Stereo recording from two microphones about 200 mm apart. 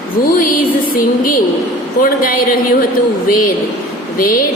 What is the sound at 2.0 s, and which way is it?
Speech, 45° left (ahead or behind).